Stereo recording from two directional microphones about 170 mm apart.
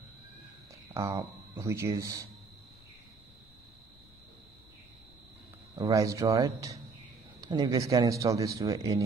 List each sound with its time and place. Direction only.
0.9 s speech: 15° right (ahead or behind)
5.8 s a man's voice: 20° right (ahead or behind)